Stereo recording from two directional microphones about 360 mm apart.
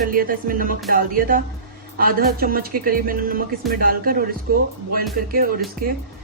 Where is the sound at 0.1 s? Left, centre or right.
Right.